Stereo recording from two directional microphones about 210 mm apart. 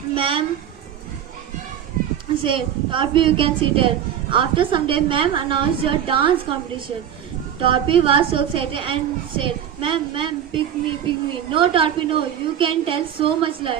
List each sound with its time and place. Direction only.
0.1 s a sound: 25° right (ahead or behind)
2.4 s a woman's voice: 25° right (ahead or behind)
7.6 s a woman's voice: 25° right (ahead or behind)